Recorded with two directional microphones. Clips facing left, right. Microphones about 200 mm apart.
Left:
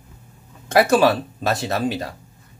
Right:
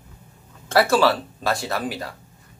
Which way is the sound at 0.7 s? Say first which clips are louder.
Left 2 dB; 20° left (ahead or behind).